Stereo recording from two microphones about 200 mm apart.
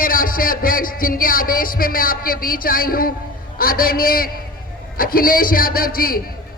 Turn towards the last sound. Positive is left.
turn(degrees=45)  # may be behind; listen again after turning